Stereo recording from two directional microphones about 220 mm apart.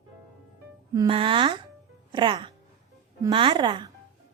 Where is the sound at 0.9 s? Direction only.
20° right (ahead or behind).